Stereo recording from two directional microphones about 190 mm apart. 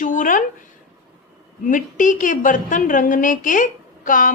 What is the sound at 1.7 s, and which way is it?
Speech, 45° left (ahead or behind).